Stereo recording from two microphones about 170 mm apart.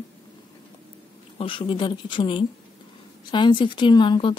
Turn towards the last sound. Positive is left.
turn(degrees=30)  # may be behind; listen again after turning